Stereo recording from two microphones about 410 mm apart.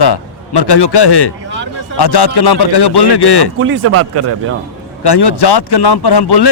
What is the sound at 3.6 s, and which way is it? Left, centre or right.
Speech, right.